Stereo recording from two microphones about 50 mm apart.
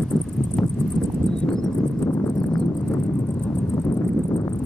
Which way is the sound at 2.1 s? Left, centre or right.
Left.